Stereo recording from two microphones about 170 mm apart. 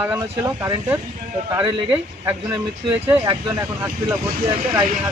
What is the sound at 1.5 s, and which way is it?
Speech, 25° right (ahead or behind).